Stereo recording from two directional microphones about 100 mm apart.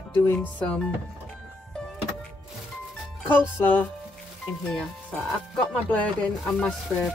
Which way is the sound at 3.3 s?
20° left (ahead or behind).